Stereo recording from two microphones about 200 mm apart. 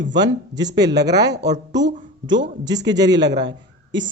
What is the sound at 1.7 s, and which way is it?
Speech, 60° right (ahead or behind).